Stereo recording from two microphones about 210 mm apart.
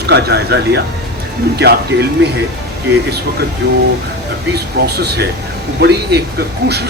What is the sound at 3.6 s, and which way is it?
Speech, 50° right (ahead or behind).